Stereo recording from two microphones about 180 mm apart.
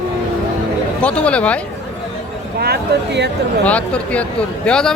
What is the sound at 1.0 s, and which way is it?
Speech, 5° left (ahead or behind).